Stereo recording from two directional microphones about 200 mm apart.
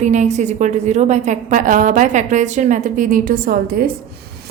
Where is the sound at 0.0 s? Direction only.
35° right (ahead or behind).